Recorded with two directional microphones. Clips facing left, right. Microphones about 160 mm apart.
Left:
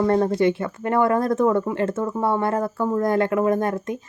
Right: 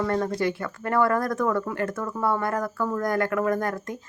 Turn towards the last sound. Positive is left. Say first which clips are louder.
# left 4 dB
turn(degrees=25)  # may be behind; listen again after turning